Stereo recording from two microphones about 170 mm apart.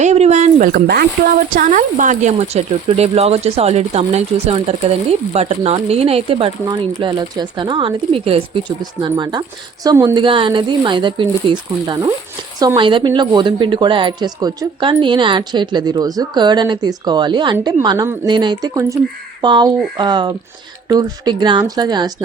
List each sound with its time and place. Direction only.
0.0 s a sound: 40° right (ahead or behind)
0.7 s speech: 65° right (ahead or behind)
1.5 s a woman's voice: 50° right (ahead or behind); by 22.1 s 25° right (ahead or behind)